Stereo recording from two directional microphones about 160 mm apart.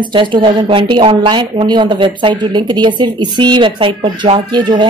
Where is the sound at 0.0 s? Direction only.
30° right (ahead or behind).